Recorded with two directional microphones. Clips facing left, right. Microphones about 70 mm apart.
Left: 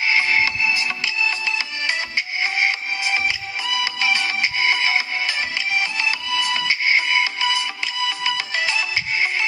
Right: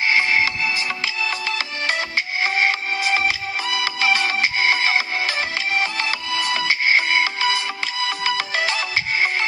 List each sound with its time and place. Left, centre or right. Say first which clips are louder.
0.1 s music: even; right
1.0 s music: left 1 dB; right
8.2 s ringtone: right 4 dB; right